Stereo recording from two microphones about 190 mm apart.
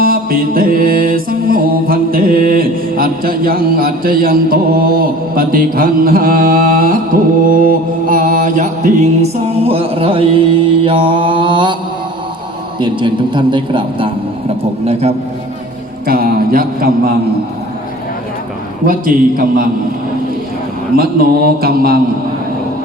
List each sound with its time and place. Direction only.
0.0 s mantra: 50° right (ahead or behind); by 11.8 s 25° right (ahead or behind)
12.8 s a man's voice: 25° right (ahead or behind)
16.0 s a man's voice: 50° right (ahead or behind)
18.9 s a man's voice: 45° right (ahead or behind)
20.9 s a man's voice: 50° right (ahead or behind)